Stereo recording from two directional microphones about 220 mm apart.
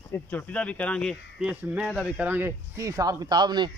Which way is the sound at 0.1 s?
10° left (ahead or behind).